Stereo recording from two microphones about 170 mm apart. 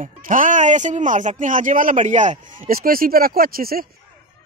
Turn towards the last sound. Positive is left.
turn(degrees=-60)  # may be behind; listen again after turning